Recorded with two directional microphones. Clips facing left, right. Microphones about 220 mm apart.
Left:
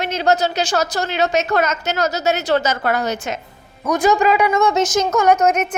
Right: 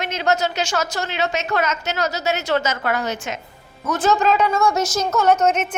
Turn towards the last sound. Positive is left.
turn(degrees=10)  # may be behind; listen again after turning